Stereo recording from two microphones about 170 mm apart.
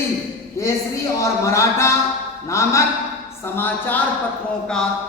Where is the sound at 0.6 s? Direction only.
15° left (ahead or behind).